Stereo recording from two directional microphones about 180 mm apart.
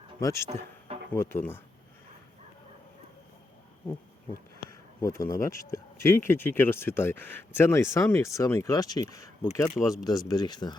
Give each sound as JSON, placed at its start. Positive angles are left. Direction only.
{"t": 0.2, "sound": "speech", "side_deg": 15}
{"t": 4.9, "sound": "speech", "side_deg": 15}